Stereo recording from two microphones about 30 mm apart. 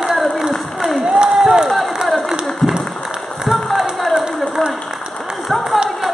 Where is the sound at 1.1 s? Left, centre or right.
Right.